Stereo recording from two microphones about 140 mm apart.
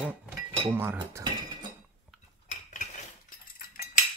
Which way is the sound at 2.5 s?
65° left (ahead or behind).